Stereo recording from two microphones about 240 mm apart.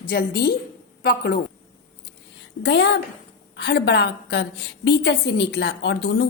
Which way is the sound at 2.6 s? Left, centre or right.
Left.